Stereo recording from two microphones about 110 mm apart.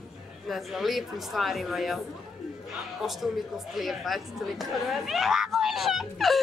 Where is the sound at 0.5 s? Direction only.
Centre (ahead or behind).